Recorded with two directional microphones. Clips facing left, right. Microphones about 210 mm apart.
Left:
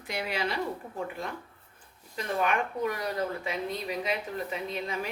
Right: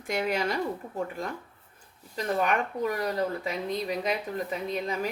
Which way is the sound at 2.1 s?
40° right (ahead or behind).